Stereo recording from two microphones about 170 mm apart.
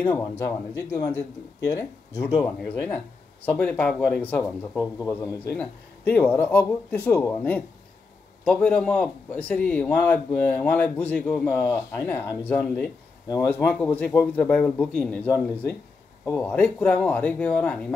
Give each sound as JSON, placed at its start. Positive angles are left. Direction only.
{"t": 0.0, "sound": "a man's voice", "side_deg": 15}